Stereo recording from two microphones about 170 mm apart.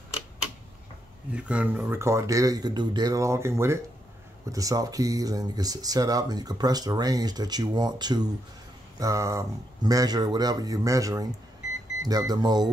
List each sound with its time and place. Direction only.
1.3 s speech: 5° right (ahead or behind); by 12.6 s 25° right (ahead or behind)